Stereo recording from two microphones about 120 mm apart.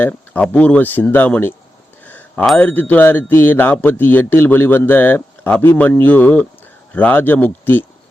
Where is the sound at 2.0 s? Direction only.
15° left (ahead or behind).